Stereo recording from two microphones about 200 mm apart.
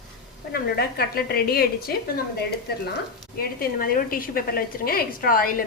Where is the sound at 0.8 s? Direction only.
50° left (ahead or behind).